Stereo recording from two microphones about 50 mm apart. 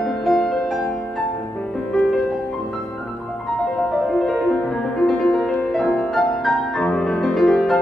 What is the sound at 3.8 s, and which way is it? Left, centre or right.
Music, centre.